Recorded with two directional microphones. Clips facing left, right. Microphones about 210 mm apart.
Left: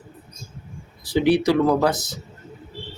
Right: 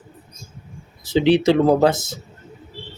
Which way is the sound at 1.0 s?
20° right (ahead or behind).